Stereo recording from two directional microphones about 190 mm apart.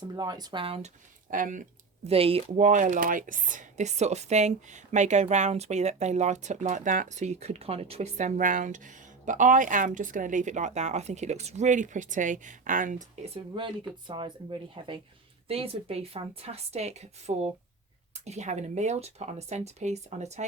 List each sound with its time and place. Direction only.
0.2 s speech: 20° right (ahead or behind)
1.3 s speech: 45° right (ahead or behind)
2.0 s speech: 30° right (ahead or behind)